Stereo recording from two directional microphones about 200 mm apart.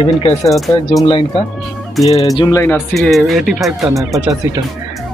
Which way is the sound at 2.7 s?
Centre (ahead or behind).